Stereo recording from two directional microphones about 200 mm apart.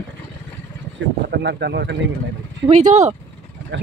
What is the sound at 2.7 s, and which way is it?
Speech, 35° right (ahead or behind).